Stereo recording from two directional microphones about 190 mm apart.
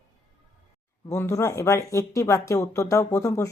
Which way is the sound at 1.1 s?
15° left (ahead or behind).